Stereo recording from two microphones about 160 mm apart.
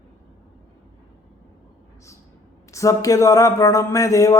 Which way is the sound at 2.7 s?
20° left (ahead or behind).